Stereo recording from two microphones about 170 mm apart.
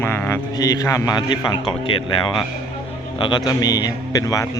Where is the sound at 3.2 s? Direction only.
25° left (ahead or behind).